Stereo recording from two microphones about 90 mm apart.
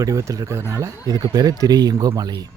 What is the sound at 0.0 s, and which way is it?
Speech, 40° right (ahead or behind).